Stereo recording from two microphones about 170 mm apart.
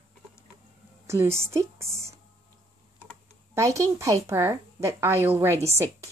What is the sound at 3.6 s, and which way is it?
A woman's voice, 15° right (ahead or behind).